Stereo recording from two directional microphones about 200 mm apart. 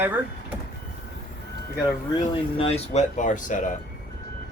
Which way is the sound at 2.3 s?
30° left (ahead or behind).